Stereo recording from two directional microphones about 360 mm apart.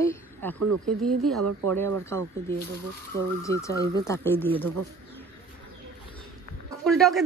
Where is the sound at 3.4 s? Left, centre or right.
Centre.